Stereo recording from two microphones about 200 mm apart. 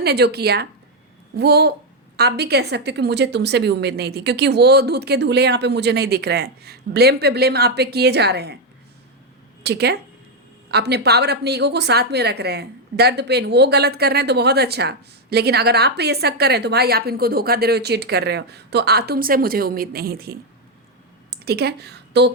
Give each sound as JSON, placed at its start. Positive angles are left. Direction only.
{"t": 0.0, "sound": "a woman's voice", "side_deg": -55}
{"t": 9.6, "sound": "a woman's voice", "side_deg": -55}
{"t": 21.2, "sound": "a sound", "side_deg": -50}